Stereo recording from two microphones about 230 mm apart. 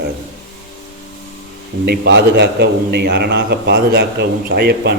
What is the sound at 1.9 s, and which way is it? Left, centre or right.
A man's voice, right.